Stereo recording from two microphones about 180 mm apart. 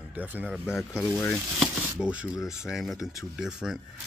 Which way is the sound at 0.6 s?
10° left (ahead or behind).